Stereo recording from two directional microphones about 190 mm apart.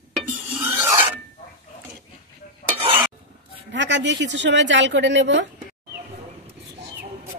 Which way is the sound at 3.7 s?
70° right (ahead or behind).